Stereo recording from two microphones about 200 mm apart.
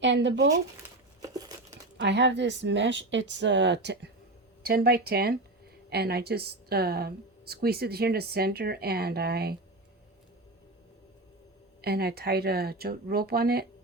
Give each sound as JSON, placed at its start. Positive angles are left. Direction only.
{"t": 0.0, "sound": "speech", "side_deg": -65}
{"t": 0.5, "sound": "crumpling", "side_deg": -15}
{"t": 2.0, "sound": "speech", "side_deg": -60}
{"t": 11.8, "sound": "speech", "side_deg": -50}